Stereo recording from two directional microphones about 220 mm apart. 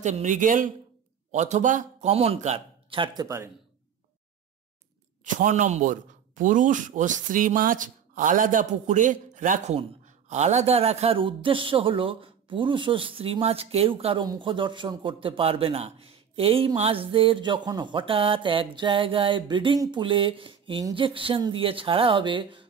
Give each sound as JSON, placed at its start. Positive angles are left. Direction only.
{"t": 0.0, "sound": "a man's voice", "side_deg": -35}
{"t": 5.2, "sound": "a man's voice", "side_deg": -35}